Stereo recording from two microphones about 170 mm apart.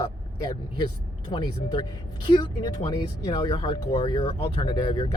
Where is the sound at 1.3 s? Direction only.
25° left (ahead or behind).